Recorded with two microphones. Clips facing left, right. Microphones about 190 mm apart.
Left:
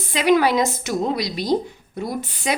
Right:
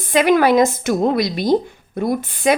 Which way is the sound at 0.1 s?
55° right (ahead or behind).